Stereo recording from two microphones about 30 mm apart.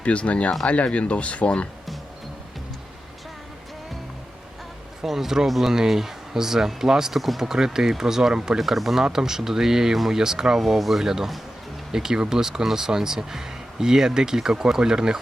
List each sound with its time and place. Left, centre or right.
0.0 s speech: left
5.0 s speech: centre
7.2 s speech: centre
7.4 s speech: centre
8.5 s speech: centre
9.1 s speech: centre
10.6 s speech: centre
11.0 s speech: centre